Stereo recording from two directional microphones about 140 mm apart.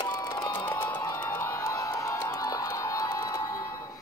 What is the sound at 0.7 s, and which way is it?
Music, 10° left (ahead or behind).